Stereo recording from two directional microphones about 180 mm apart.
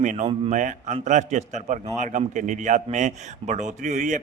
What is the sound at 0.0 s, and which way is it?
A man's voice, 40° right (ahead or behind).